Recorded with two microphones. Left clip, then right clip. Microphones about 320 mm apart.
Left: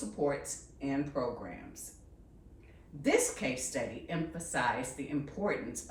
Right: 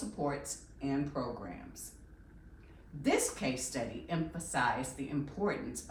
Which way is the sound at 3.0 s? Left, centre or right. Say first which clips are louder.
Left 2 dB; centre.